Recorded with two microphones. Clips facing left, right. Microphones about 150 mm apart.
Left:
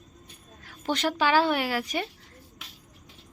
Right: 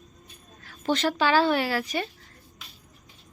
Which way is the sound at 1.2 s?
15° left (ahead or behind).